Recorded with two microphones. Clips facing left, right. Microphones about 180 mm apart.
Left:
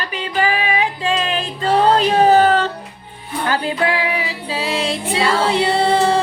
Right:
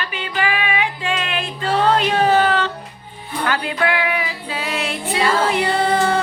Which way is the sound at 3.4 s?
30° left (ahead or behind).